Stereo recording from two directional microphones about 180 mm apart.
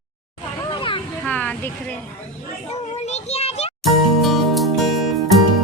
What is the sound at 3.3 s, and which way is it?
Music, 35° left (ahead or behind).